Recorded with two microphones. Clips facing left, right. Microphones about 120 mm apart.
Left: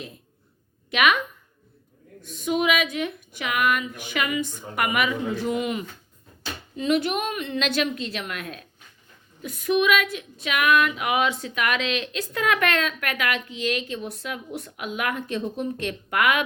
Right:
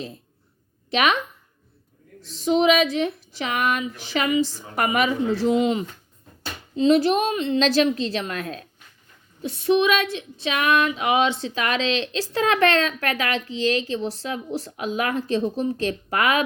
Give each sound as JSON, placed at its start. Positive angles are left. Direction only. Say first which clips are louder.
{"t": 0.9, "sound": "speech", "louder": "right 1 dB", "side_deg": -35}
{"t": 2.2, "sound": "speech", "louder": "right 5 dB", "side_deg": -30}
{"t": 9.4, "sound": "a sound", "louder": "right 3 dB", "side_deg": -30}